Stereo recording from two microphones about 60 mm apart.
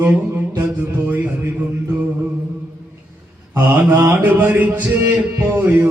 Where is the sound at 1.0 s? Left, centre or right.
Right.